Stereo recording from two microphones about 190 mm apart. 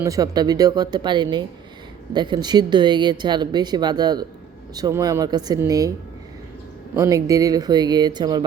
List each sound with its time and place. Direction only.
0.0 s speech: 20° right (ahead or behind)
6.9 s speech: 15° right (ahead or behind)